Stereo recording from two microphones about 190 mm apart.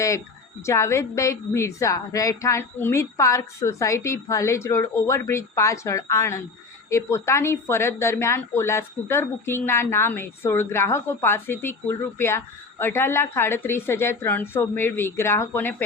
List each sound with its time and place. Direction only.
0.6 s a woman's voice: 15° left (ahead or behind)